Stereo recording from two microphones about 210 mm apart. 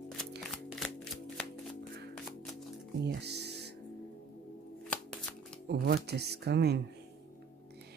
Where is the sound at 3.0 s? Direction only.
50° right (ahead or behind).